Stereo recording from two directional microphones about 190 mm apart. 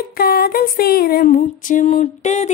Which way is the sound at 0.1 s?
50° left (ahead or behind).